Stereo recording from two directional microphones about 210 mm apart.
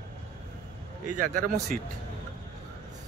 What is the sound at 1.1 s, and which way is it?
Speech, 40° right (ahead or behind).